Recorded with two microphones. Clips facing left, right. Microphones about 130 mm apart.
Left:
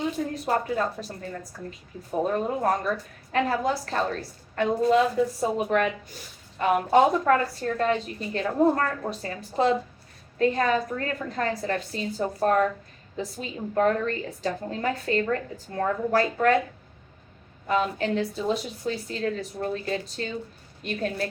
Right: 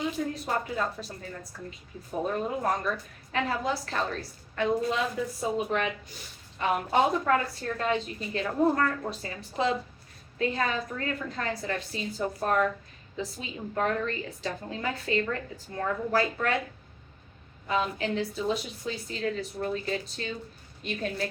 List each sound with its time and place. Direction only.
0.4 s a woman's voice: 40° left (ahead or behind)
2.2 s a woman's voice: 40° left (ahead or behind)
17.7 s a woman's voice: 40° left (ahead or behind)